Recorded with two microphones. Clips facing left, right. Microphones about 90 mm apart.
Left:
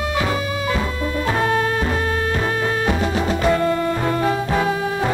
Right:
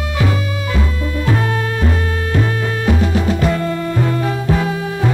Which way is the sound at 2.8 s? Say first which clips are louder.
Right 3 dB; 30° left (ahead or behind).